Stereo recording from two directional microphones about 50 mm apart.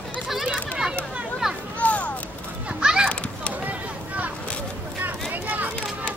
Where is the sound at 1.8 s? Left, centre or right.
Left.